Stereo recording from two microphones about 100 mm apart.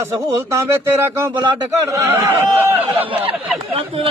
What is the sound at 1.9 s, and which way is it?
Speech, 25° right (ahead or behind).